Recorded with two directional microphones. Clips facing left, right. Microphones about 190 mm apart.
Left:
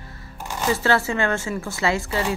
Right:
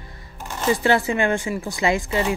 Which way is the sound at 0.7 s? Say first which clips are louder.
Right 2 dB; 15° right (ahead or behind).